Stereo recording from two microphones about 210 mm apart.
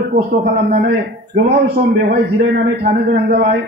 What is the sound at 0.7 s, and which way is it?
A man's voice, 50° right (ahead or behind).